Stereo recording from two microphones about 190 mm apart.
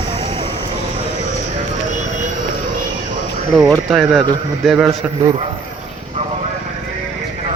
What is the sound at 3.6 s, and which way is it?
Speech, centre (ahead or behind).